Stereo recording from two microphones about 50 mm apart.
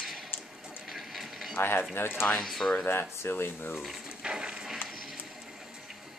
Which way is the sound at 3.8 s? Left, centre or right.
Centre.